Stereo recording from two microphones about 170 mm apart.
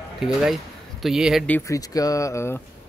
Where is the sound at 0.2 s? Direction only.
Centre (ahead or behind).